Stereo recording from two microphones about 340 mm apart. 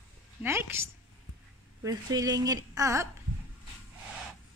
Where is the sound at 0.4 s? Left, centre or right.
Centre.